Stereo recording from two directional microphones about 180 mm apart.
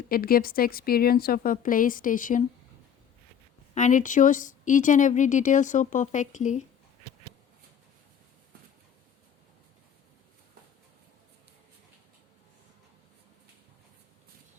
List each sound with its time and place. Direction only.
0.1 s a woman's voice: 55° left (ahead or behind)
3.8 s speech: 45° left (ahead or behind)